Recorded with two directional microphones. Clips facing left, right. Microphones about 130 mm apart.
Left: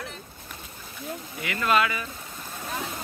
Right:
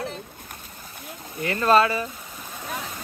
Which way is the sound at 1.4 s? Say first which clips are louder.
Right 5 dB; 35° right (ahead or behind).